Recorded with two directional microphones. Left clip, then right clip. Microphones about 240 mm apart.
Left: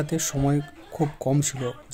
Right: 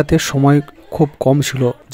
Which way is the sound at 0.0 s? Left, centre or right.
Right.